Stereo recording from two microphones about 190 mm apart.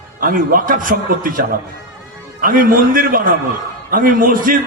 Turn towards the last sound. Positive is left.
turn(degrees=-50)  # may be behind; listen again after turning